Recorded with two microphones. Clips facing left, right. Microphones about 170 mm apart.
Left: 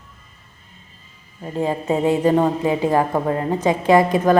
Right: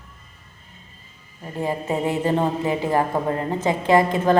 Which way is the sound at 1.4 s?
20° left (ahead or behind).